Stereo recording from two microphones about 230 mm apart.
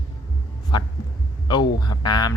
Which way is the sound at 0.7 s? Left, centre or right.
Centre.